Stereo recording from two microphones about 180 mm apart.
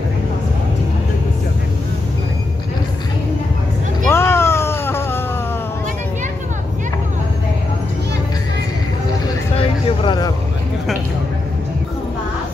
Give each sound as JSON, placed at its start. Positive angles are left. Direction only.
{"t": 4.1, "sound": "cat", "side_deg": 15}
{"t": 9.8, "sound": "vehicle", "side_deg": 25}